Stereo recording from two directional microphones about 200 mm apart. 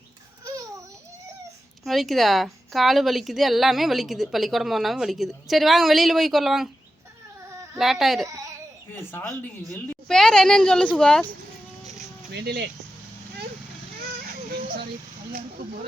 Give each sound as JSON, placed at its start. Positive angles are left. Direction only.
{"t": 1.8, "sound": "a woman's voice", "side_deg": 0}
{"t": 7.5, "sound": "baby cry", "side_deg": -15}
{"t": 7.8, "sound": "a woman's voice", "side_deg": 0}
{"t": 8.3, "sound": "baby cry", "side_deg": -15}
{"t": 9.7, "sound": "a woman's voice", "side_deg": 5}
{"t": 12.3, "sound": "speech", "side_deg": -55}